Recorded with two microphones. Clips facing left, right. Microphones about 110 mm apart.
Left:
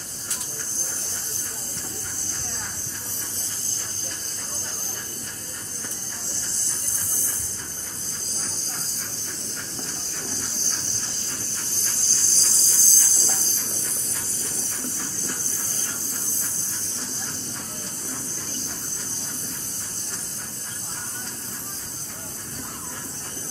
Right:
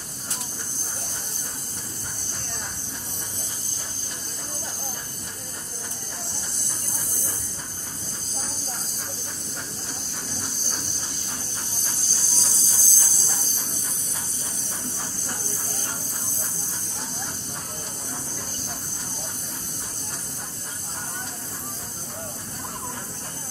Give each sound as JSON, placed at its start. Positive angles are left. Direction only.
{"t": 10.3, "sound": "hiss", "side_deg": -15}
{"t": 11.7, "sound": "music", "side_deg": -15}